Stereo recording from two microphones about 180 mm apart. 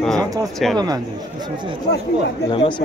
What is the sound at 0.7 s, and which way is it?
Speech, 20° right (ahead or behind).